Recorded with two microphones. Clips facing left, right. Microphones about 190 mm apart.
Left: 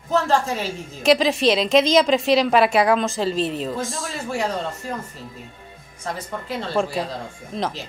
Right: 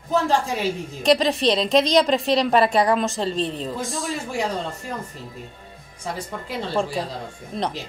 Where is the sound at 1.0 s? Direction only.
Centre (ahead or behind).